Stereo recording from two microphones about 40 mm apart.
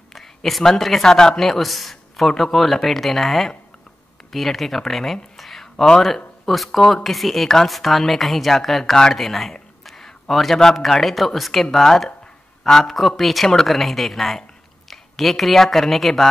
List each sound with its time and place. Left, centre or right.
0.1 s a sound: centre
1.0 s speech: centre
1.4 s a man's voice: centre